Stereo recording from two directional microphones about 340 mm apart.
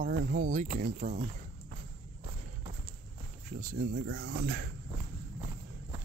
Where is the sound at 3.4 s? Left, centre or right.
Right.